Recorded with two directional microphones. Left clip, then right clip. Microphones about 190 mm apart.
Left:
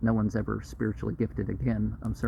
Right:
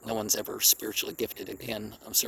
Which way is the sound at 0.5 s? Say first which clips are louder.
Right 5 dB; 60° right (ahead or behind).